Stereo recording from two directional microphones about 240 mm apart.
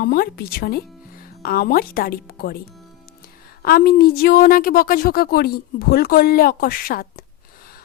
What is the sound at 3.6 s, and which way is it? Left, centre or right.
Speech, left.